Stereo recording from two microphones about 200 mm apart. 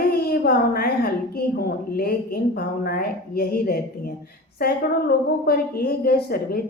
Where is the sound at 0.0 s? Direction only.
50° left (ahead or behind).